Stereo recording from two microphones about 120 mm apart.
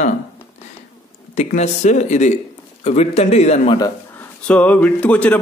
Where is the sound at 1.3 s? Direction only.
70° left (ahead or behind).